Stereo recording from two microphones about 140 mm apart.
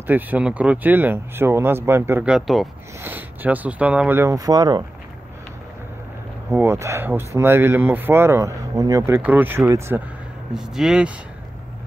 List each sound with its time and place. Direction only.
0.0 s speech: 10° right (ahead or behind)
2.3 s speech: centre (ahead or behind)
3.0 s speech: 15° right (ahead or behind)
6.5 s speech: 20° right (ahead or behind)
10.5 s speech: 5° right (ahead or behind)